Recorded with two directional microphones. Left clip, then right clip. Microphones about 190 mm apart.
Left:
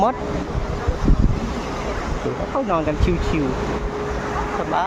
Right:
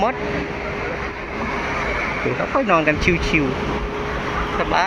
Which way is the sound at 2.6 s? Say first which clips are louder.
Right 6 dB; 5° left (ahead or behind).